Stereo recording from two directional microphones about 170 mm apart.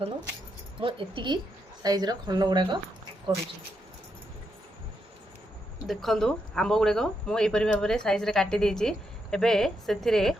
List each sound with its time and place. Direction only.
0.8 s speech: 30° right (ahead or behind)
5.9 s speech: centre (ahead or behind)